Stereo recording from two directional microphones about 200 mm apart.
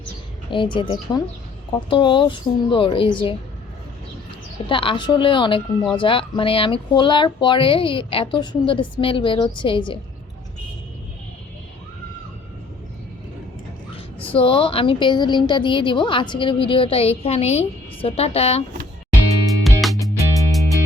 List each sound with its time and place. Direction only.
0.5 s a woman's voice: 25° left (ahead or behind)
4.7 s a woman's voice: 25° left (ahead or behind)
14.3 s a woman's voice: 25° left (ahead or behind)
19.6 s music: centre (ahead or behind)
20.1 s music: 15° left (ahead or behind)
20.5 s music: centre (ahead or behind)